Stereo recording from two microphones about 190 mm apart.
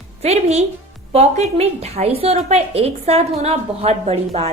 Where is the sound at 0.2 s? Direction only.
35° right (ahead or behind).